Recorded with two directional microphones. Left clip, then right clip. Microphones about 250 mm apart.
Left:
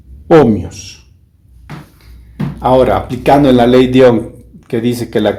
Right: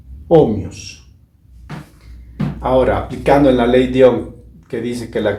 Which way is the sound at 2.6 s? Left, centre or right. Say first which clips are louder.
Left 5 dB; left.